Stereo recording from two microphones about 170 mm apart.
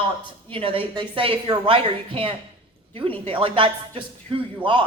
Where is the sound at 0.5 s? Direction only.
30° right (ahead or behind).